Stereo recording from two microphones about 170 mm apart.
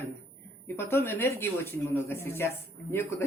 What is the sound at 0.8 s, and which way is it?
Speech, 15° left (ahead or behind).